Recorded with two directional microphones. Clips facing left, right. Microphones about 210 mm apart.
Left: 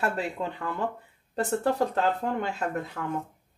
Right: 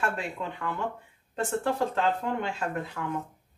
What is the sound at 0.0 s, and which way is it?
Speech, 35° left (ahead or behind).